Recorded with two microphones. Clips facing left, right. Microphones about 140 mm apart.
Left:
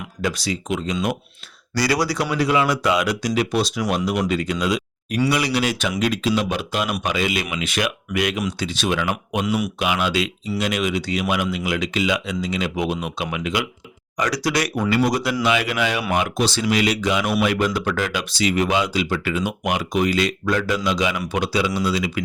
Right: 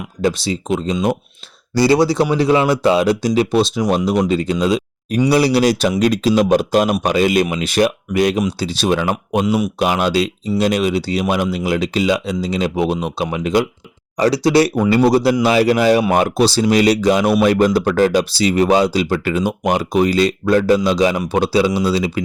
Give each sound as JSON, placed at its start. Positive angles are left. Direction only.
{"t": 0.2, "sound": "speech", "side_deg": -30}
{"t": 14.2, "sound": "speech", "side_deg": -25}